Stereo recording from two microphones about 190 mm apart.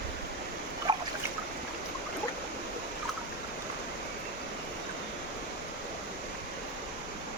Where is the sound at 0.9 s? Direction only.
25° right (ahead or behind).